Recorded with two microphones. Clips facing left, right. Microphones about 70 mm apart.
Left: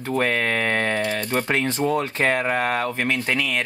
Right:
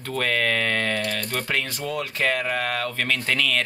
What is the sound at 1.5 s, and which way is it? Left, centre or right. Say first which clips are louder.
Speech: left 8 dB; left.